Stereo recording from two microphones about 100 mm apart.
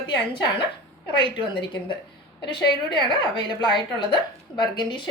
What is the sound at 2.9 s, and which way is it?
Speech, 50° left (ahead or behind).